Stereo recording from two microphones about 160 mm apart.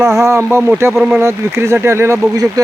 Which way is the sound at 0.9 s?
5° right (ahead or behind).